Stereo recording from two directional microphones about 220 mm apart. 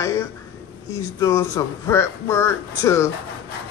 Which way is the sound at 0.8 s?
15° left (ahead or behind).